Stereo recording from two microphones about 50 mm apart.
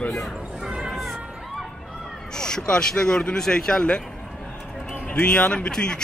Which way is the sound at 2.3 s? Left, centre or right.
Centre.